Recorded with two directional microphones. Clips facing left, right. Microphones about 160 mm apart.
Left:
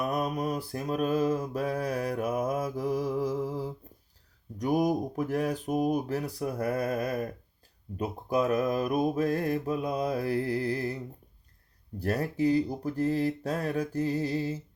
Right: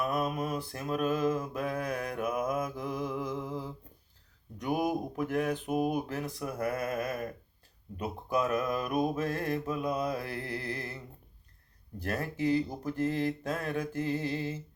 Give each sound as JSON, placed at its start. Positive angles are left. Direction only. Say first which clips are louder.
{"t": 0.0, "sound": "mantra", "louder": "left 2 dB", "side_deg": 40}
{"t": 4.5, "sound": "speech", "louder": "left 4 dB", "side_deg": 35}